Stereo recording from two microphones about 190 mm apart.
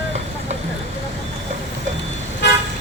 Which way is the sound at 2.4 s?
65° left (ahead or behind).